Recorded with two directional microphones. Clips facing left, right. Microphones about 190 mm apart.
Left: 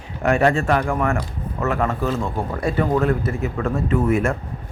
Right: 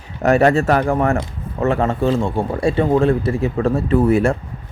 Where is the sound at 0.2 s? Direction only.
40° right (ahead or behind).